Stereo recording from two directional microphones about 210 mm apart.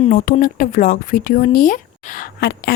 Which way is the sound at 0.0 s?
35° left (ahead or behind).